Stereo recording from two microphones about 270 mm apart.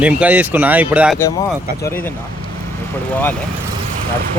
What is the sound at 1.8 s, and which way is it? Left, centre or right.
Speech, centre.